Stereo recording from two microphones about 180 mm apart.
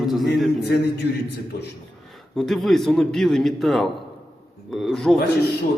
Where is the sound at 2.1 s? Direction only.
Centre (ahead or behind).